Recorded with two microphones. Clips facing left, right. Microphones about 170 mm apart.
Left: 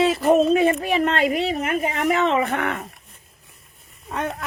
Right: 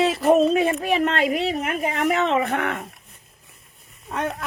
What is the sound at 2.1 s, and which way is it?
Speech, 40° left (ahead or behind).